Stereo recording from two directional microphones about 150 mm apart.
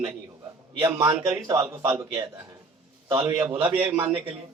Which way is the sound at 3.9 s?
10° right (ahead or behind).